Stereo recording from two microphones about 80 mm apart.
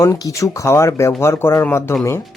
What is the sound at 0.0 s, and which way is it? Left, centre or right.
Speech, left.